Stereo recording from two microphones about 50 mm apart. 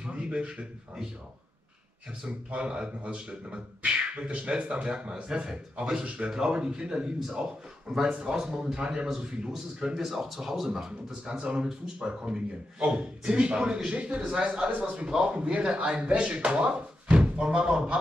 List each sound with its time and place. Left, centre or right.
0.0 s a sound: right
2.2 s a man's voice: right
11.3 s a man's voice: right